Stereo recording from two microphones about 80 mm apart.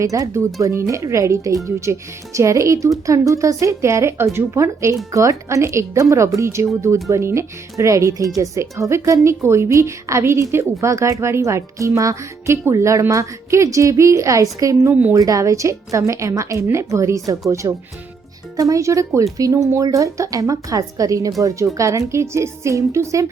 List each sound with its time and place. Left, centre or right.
0.0 s a woman's voice: right